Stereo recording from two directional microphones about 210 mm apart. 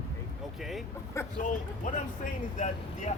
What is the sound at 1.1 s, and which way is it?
Speech, 15° left (ahead or behind).